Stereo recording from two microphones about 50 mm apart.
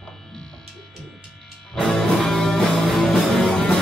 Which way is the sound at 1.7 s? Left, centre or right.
Centre.